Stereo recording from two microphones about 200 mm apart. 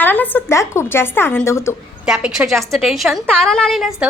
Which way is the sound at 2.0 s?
5° right (ahead or behind).